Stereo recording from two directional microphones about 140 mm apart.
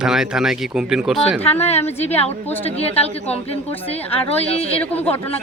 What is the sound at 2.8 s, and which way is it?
Speech, 45° left (ahead or behind).